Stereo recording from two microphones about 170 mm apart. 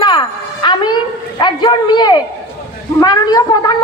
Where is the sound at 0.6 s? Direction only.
25° left (ahead or behind).